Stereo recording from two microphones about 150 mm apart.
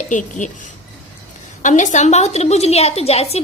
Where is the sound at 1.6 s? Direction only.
55° left (ahead or behind).